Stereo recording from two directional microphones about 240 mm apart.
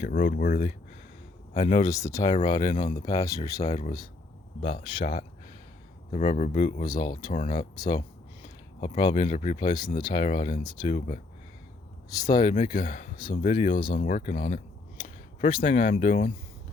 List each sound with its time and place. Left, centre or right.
0.0 s speech: left
1.8 s speech: centre
3.1 s speech: centre
3.6 s speech: left
6.8 s speech: centre
7.3 s speech: left
8.8 s speech: centre
9.2 s speech: left
9.6 s speech: centre
10.2 s speech: left
10.6 s speech: centre
10.9 s speech: left
12.2 s speech: centre
12.5 s speech: left